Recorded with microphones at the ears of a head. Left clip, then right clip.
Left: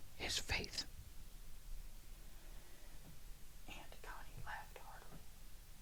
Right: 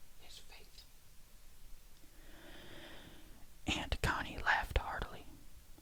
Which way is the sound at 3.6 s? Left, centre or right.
Right.